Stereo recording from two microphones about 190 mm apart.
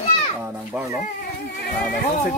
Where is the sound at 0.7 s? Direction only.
10° right (ahead or behind).